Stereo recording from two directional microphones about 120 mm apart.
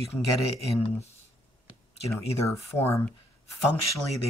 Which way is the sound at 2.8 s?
15° left (ahead or behind).